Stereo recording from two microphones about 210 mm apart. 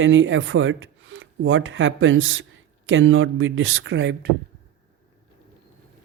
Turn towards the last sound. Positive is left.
turn(degrees=-55)  # may be behind; listen again after turning